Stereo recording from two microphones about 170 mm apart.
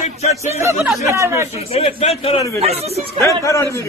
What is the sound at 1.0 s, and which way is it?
Speech, 15° right (ahead or behind).